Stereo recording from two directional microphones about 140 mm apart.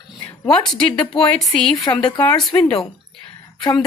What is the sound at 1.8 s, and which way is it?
Speech, 35° left (ahead or behind).